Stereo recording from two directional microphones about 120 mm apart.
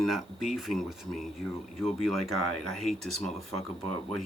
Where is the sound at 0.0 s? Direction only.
Centre (ahead or behind).